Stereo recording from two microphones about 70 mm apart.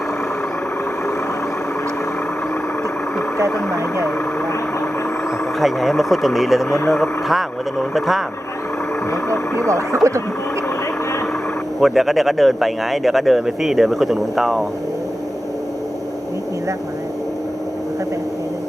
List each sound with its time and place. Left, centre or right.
5.5 s a man's voice: centre
9.6 s speech: right
11.8 s a man's voice: centre